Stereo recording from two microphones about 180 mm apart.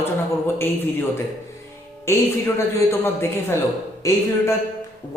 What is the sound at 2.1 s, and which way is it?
A man's voice, 15° left (ahead or behind).